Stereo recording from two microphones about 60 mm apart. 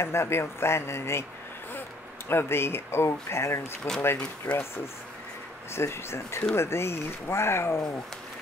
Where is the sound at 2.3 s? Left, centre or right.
Left.